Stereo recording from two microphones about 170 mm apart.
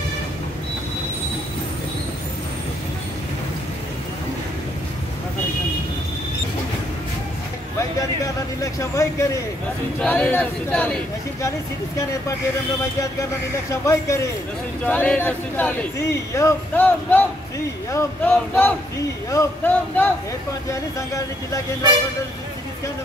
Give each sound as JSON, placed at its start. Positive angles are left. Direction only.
{"t": 8.5, "sound": "speech", "side_deg": 20}
{"t": 13.7, "sound": "speech", "side_deg": 15}